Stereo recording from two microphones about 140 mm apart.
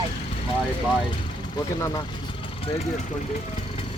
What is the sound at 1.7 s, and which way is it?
Vehicle, 30° left (ahead or behind).